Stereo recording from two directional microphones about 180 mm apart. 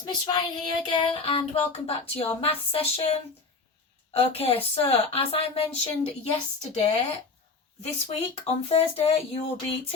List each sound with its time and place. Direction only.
0.0 s child singing: 25° left (ahead or behind)
1.9 s speech: 30° left (ahead or behind)